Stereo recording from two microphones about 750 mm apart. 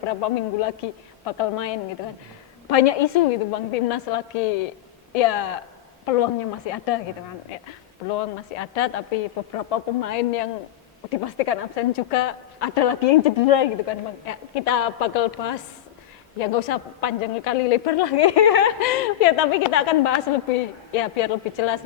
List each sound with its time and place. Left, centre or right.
0.2 s a woman's voice: left
6.7 s a woman's voice: left
8.1 s a woman's voice: left